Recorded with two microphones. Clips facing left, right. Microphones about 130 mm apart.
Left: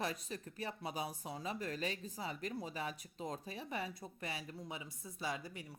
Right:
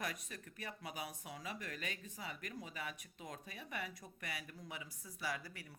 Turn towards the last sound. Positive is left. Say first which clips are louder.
# left 2 dB
turn(degrees=20)  # may be behind; listen again after turning